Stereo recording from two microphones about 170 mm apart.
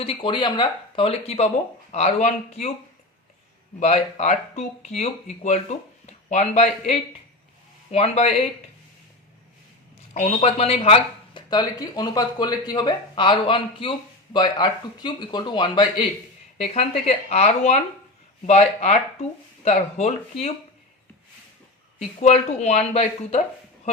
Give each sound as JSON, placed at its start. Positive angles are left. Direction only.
{"t": 0.0, "sound": "speech", "side_deg": 30}
{"t": 3.8, "sound": "speech", "side_deg": 40}
{"t": 10.2, "sound": "speech", "side_deg": 35}
{"t": 16.6, "sound": "speech", "side_deg": 35}
{"t": 21.9, "sound": "speech", "side_deg": 40}